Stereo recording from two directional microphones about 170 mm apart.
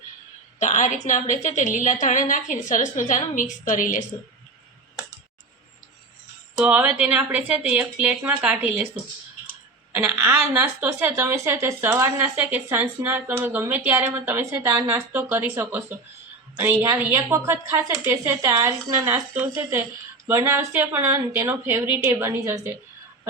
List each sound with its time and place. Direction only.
0.6 s a woman's voice: 45° left (ahead or behind)
6.6 s a woman's voice: 5° right (ahead or behind)
9.9 s a woman's voice: 10° right (ahead or behind)